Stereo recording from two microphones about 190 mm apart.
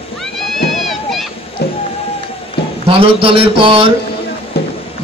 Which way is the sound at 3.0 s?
30° right (ahead or behind).